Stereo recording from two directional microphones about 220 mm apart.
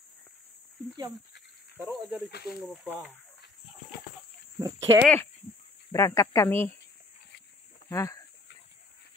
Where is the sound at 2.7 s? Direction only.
5° left (ahead or behind).